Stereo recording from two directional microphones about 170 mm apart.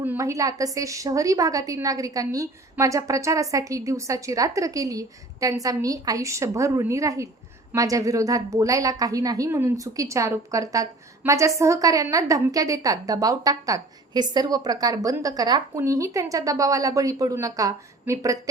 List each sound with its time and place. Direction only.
0.0 s a woman's voice: 15° right (ahead or behind)